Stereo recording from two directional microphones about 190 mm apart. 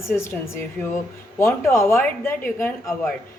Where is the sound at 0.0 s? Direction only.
15° left (ahead or behind).